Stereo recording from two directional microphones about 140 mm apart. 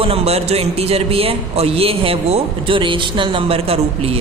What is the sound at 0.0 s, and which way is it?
A man's voice, 45° right (ahead or behind).